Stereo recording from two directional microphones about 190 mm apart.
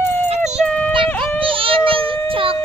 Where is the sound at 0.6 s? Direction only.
5° left (ahead or behind).